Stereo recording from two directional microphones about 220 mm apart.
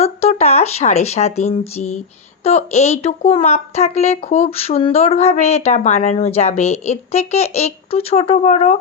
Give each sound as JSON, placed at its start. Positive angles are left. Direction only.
{"t": 0.0, "sound": "speech", "side_deg": 30}